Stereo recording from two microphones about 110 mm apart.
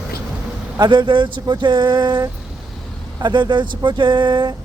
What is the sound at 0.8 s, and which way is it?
Speech, 45° right (ahead or behind).